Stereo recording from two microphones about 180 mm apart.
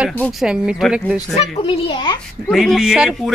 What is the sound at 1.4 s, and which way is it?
Speech, 30° left (ahead or behind).